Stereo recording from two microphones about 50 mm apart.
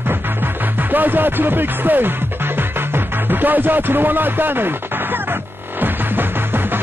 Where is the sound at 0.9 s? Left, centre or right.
Right.